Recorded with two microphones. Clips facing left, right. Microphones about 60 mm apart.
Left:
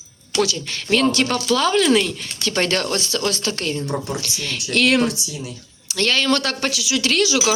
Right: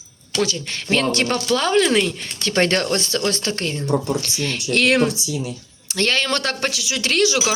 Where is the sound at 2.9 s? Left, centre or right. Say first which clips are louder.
Right 1 dB; right.